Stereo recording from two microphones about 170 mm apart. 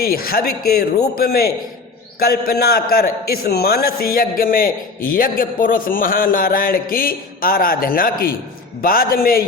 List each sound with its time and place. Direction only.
0.0 s a man's voice: 60° left (ahead or behind)